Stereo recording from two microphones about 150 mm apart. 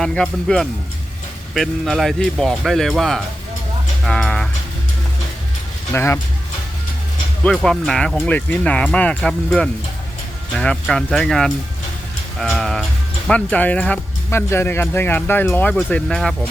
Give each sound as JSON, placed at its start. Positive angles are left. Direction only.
{"t": 0.0, "sound": "speech", "side_deg": 5}
{"t": 5.9, "sound": "speech", "side_deg": 15}
{"t": 7.4, "sound": "speech", "side_deg": 5}